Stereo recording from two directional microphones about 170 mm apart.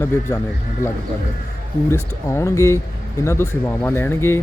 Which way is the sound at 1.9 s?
15° left (ahead or behind).